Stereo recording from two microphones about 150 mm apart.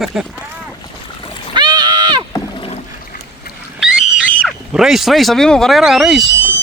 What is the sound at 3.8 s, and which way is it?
Wild animals, centre (ahead or behind).